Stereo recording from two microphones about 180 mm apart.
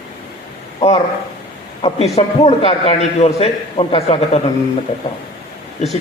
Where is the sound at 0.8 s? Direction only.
35° left (ahead or behind).